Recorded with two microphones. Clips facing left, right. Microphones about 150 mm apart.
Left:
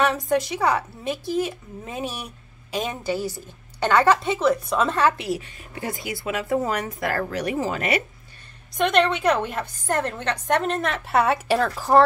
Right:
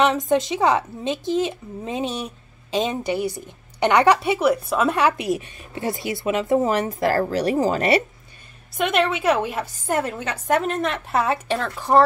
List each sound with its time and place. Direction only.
0.0 s speech: 20° right (ahead or behind)
8.7 s a woman's voice: 5° right (ahead or behind)